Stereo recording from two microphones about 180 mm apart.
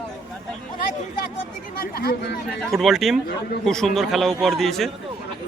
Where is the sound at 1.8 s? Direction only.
60° left (ahead or behind).